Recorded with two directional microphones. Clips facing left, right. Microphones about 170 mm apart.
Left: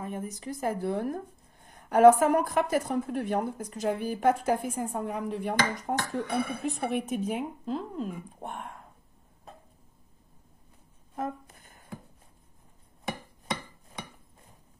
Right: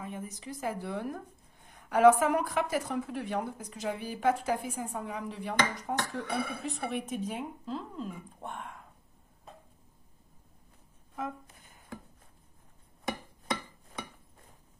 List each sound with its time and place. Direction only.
0.0 s a woman's voice: 45° left (ahead or behind)